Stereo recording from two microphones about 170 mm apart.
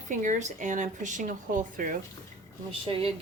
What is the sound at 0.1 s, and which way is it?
Speech, 45° right (ahead or behind).